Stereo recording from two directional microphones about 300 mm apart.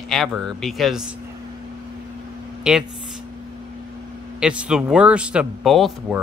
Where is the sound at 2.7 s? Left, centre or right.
Centre.